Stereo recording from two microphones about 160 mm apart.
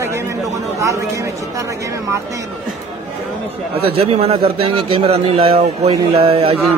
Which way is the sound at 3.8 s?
35° right (ahead or behind).